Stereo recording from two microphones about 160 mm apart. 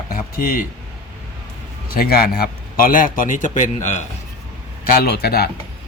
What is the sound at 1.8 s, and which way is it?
A man's voice, 70° left (ahead or behind).